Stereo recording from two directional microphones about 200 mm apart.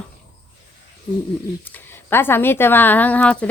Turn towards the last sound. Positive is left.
turn(degrees=5)  # may be behind; listen again after turning